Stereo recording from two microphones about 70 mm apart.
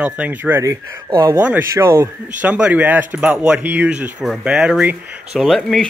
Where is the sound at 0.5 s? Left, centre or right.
Right.